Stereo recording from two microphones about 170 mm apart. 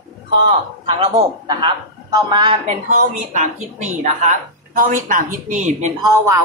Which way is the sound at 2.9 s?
45° right (ahead or behind).